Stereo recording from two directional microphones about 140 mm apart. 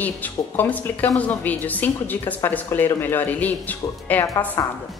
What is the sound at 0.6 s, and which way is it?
A woman's voice, 10° left (ahead or behind).